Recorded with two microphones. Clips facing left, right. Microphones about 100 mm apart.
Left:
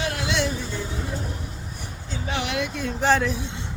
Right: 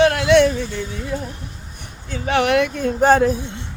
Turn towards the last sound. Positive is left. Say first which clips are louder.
# right 7 dB
turn(degrees=-45)  # may be behind; listen again after turning